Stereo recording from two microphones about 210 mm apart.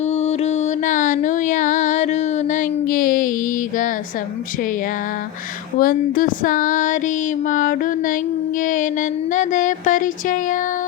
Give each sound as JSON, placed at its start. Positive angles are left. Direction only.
{"t": 0.1, "sound": "music", "side_deg": 30}
{"t": 5.8, "sound": "music", "side_deg": 40}